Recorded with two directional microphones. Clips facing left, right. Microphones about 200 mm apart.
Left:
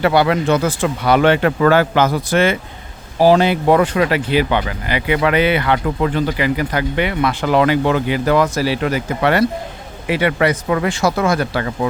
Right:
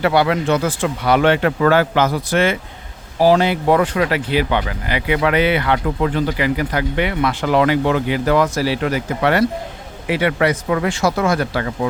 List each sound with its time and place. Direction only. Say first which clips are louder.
0.0 s speech: left 1 dB; 35° left (ahead or behind)
3.2 s speech: left 2 dB; 25° left (ahead or behind)